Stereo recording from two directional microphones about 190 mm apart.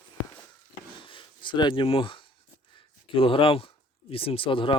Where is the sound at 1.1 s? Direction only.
25° left (ahead or behind).